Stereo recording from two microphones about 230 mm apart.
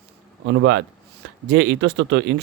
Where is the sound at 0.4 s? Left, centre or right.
Right.